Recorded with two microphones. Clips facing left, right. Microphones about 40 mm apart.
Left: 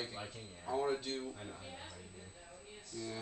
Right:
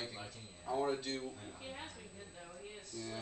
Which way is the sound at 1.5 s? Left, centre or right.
Right.